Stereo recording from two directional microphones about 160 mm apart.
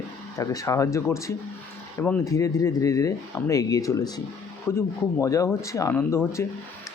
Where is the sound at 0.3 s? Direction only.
20° left (ahead or behind).